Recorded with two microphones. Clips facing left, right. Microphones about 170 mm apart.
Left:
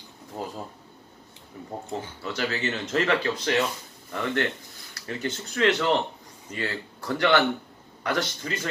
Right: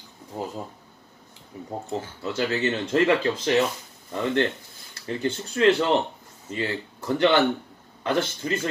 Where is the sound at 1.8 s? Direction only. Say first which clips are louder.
Right 3 dB; 25° right (ahead or behind).